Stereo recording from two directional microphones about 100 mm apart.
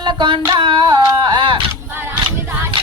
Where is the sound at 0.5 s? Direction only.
55° right (ahead or behind).